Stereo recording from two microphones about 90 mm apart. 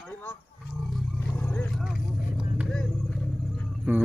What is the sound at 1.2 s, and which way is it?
Vehicle, 25° left (ahead or behind).